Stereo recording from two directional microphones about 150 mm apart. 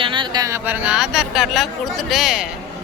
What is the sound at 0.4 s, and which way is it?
Speech, 15° right (ahead or behind).